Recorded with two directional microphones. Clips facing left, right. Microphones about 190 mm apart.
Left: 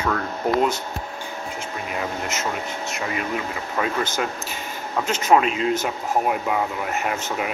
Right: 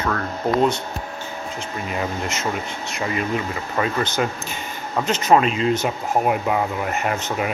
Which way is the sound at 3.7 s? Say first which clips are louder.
Right 2 dB; 5° left (ahead or behind).